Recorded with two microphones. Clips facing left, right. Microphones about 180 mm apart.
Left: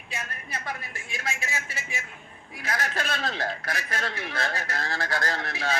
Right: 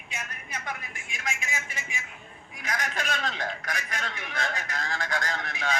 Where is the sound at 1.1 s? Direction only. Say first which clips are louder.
Left 2 dB; 35° left (ahead or behind).